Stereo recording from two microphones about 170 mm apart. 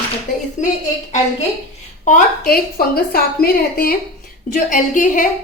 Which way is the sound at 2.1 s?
55° left (ahead or behind).